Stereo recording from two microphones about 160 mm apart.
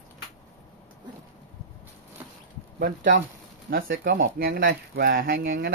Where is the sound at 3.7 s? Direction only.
65° right (ahead or behind).